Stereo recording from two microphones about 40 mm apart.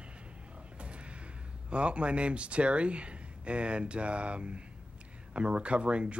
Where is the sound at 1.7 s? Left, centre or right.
Right.